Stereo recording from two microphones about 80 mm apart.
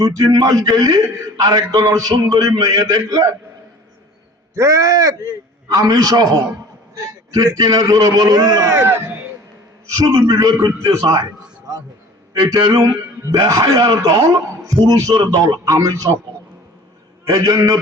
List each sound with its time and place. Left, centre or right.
0.0 s a man's voice: right
4.5 s a man's voice: right
9.9 s a man's voice: right
12.3 s a man's voice: right
13.3 s a man's voice: right
17.2 s a man's voice: right